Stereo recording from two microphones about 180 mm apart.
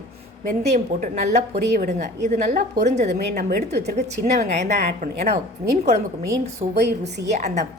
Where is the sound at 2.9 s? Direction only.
40° right (ahead or behind).